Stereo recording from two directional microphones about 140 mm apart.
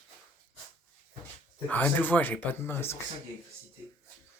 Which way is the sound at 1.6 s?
10° left (ahead or behind).